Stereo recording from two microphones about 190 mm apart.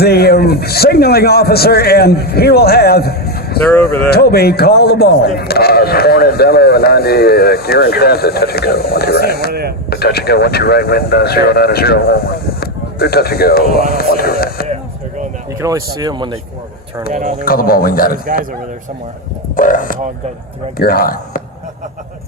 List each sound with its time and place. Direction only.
0.0 s a man's voice: 55° left (ahead or behind)
9.5 s a man's voice: 55° right (ahead or behind)
9.9 s a man's voice: 55° left (ahead or behind)
15.6 s speech: 20° right (ahead or behind)
17.1 s speech: 40° right (ahead or behind)
17.4 s a man's voice: 50° left (ahead or behind)
19.5 s a man's voice: 45° left (ahead or behind)